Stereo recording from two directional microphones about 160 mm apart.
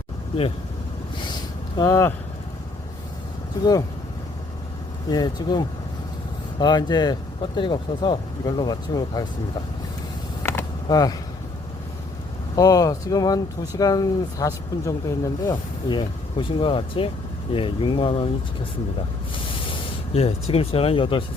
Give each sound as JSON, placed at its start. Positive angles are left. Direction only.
{"t": 1.8, "sound": "speech", "side_deg": 20}
{"t": 3.6, "sound": "speech", "side_deg": 25}
{"t": 5.1, "sound": "speech", "side_deg": 25}
{"t": 10.4, "sound": "mechanisms", "side_deg": 15}
{"t": 10.8, "sound": "speech", "side_deg": 25}
{"t": 12.5, "sound": "speech", "side_deg": 25}
{"t": 19.7, "sound": "speech", "side_deg": 40}